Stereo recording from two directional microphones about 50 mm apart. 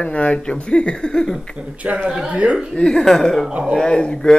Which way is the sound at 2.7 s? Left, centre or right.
Centre.